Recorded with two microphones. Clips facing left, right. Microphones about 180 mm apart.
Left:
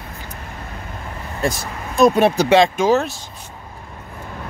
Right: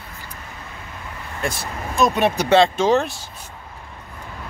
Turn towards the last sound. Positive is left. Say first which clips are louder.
# left 1 dB
turn(degrees=0)  # may be behind; listen again after turning